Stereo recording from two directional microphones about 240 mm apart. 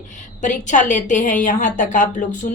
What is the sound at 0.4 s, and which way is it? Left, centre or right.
A woman's voice, left.